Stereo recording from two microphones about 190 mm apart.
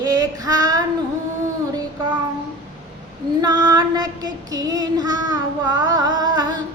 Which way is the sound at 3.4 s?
20° right (ahead or behind).